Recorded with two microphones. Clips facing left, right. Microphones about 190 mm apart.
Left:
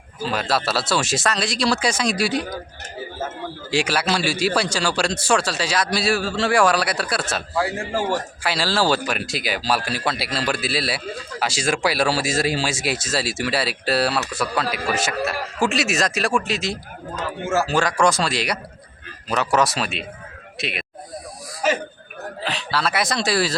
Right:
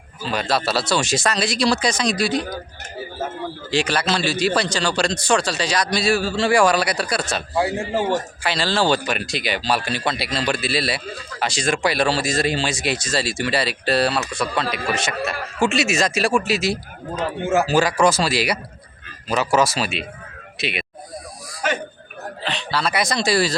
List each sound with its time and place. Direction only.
0.3 s speech: centre (ahead or behind)
3.7 s speech: 10° left (ahead or behind)
7.5 s a man's voice: 20° right (ahead or behind)
8.4 s speech: 5° left (ahead or behind)
17.2 s speech: 15° right (ahead or behind)
17.7 s speech: 5° right (ahead or behind)
22.4 s speech: 5° left (ahead or behind)